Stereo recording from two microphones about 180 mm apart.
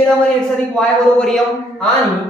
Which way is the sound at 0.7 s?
5° left (ahead or behind).